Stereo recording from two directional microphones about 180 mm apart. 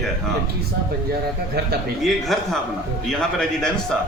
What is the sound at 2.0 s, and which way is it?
A man's voice, centre (ahead or behind).